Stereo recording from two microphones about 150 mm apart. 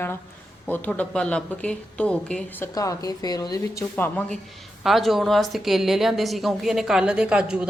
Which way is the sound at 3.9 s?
10° left (ahead or behind).